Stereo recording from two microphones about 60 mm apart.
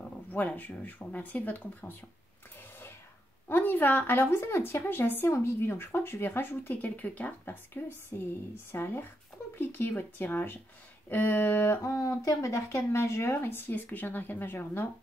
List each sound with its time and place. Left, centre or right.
0.3 s speech: left
3.4 s speech: left
5.3 s speech: left
7.4 s speech: left
11.8 s speech: left
12.6 s speech: left